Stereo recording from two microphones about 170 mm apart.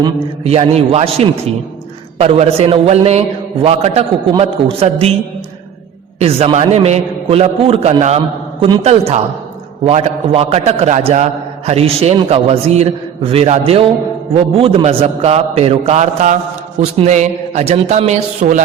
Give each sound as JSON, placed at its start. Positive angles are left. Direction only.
{"t": 0.4, "sound": "a man's voice", "side_deg": -35}
{"t": 6.1, "sound": "a man's voice", "side_deg": -35}